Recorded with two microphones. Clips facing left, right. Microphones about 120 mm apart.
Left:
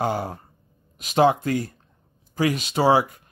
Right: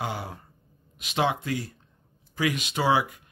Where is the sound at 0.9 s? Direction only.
40° left (ahead or behind).